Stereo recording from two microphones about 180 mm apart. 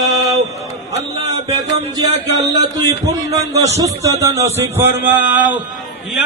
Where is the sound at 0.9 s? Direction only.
25° right (ahead or behind).